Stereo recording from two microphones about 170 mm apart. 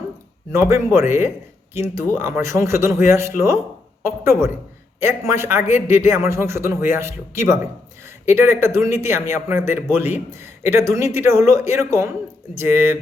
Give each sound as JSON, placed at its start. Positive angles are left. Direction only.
{"t": 0.5, "sound": "a man's voice", "side_deg": -15}